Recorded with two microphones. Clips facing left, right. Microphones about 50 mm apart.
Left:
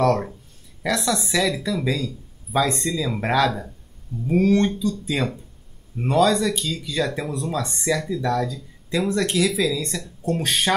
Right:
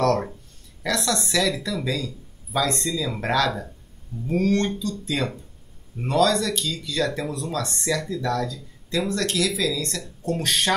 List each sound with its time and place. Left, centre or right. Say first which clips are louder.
0.8 s speech: left 2 dB; centre